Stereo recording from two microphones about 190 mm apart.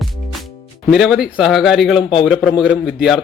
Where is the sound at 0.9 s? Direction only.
Centre (ahead or behind).